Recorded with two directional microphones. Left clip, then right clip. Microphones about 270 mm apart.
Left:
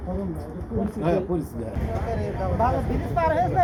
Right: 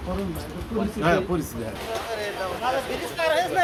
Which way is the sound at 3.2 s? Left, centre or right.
Right.